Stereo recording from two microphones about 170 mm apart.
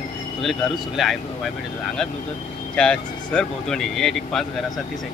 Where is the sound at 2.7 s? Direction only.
5° left (ahead or behind).